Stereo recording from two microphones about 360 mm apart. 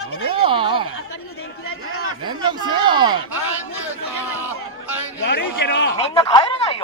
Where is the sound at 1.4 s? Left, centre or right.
Left.